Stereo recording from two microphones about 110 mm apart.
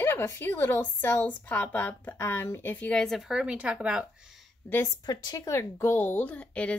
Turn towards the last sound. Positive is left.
turn(degrees=10)  # may be behind; listen again after turning